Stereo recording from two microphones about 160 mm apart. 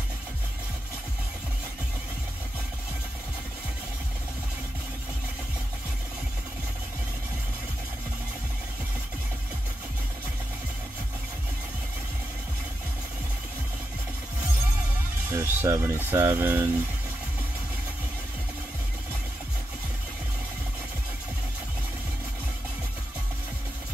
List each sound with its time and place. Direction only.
15.3 s speech: 20° right (ahead or behind)